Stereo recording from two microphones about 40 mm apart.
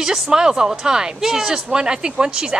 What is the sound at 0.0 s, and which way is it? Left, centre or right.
Speech, centre.